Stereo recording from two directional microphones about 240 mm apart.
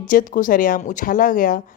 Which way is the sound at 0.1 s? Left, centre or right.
Left.